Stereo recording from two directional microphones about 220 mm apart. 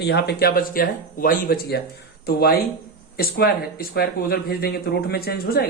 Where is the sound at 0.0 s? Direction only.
50° left (ahead or behind).